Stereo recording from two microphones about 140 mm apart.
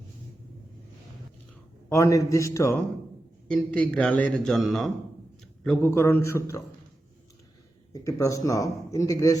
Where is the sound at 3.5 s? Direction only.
5° left (ahead or behind).